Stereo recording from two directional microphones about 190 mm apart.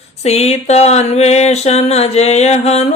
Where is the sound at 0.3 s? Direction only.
35° left (ahead or behind).